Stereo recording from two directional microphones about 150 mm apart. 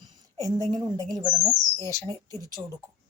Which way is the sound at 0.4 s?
25° right (ahead or behind).